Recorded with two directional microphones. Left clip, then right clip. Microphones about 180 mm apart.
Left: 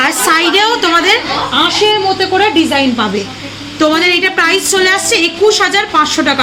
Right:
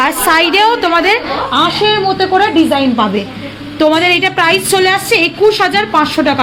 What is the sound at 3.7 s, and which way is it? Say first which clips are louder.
A woman's voice: right 1 dB; 45° right (ahead or behind).